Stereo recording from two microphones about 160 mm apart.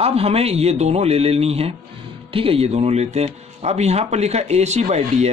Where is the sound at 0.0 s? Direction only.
40° right (ahead or behind).